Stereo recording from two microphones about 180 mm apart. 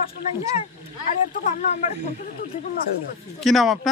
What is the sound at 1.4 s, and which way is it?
Speech, 40° left (ahead or behind).